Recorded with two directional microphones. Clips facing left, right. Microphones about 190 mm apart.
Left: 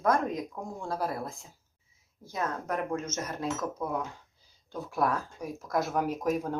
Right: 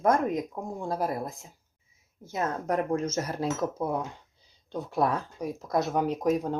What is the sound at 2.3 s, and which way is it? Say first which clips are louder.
Speech: right 4 dB; 30° right (ahead or behind).